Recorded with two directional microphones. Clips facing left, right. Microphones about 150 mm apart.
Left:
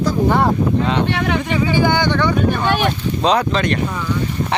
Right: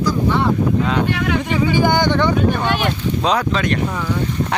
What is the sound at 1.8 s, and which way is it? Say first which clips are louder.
Speech: right 1 dB; 15° right (ahead or behind).